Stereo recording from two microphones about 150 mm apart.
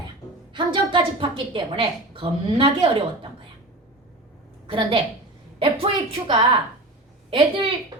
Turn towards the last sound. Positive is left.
turn(degrees=-35)  # may be behind; listen again after turning